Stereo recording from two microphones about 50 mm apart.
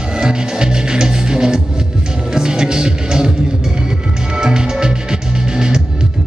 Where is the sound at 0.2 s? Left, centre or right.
Centre.